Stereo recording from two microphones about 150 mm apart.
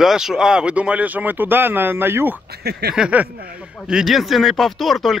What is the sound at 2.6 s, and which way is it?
Snicker, 90° right.